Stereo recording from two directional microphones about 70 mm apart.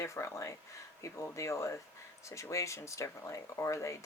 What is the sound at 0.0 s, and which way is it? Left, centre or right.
Speech, left.